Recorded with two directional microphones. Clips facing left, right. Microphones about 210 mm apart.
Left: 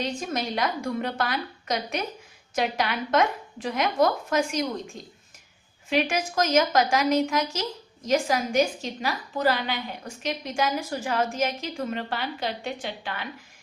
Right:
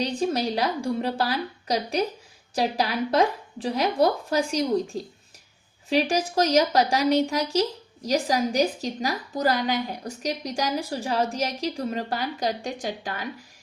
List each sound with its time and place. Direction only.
0.0 s a woman's voice: 35° right (ahead or behind)